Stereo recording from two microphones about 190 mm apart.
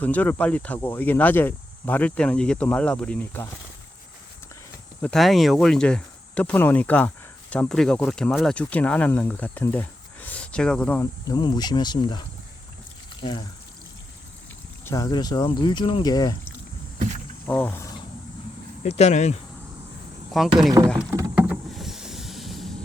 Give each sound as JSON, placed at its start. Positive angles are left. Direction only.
{"t": 0.0, "sound": "speech", "side_deg": 10}
{"t": 5.0, "sound": "speech", "side_deg": 0}
{"t": 14.8, "sound": "speech", "side_deg": 15}
{"t": 17.4, "sound": "speech", "side_deg": 10}
{"t": 18.8, "sound": "speech", "side_deg": 35}
{"t": 20.4, "sound": "speech", "side_deg": 0}
{"t": 20.8, "sound": "speech", "side_deg": -15}
{"t": 21.1, "sound": "rowboat", "side_deg": -15}
{"t": 21.5, "sound": "vehicle", "side_deg": 0}